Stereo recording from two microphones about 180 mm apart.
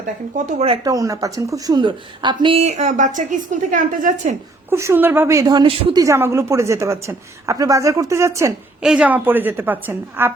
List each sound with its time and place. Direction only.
0.9 s speech: 20° right (ahead or behind); by 4.4 s 45° right (ahead or behind)
4.7 s a woman's voice: 15° right (ahead or behind)
8.8 s a woman's voice: 5° right (ahead or behind)